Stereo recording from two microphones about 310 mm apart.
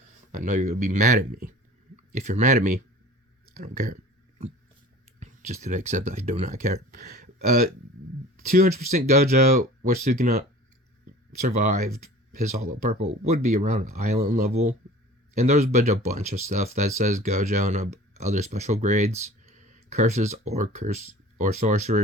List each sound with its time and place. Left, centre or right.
0.3 s speech: right
5.2 s speech: right
11.4 s speech: right